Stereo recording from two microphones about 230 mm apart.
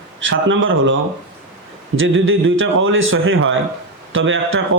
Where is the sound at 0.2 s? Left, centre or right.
Right.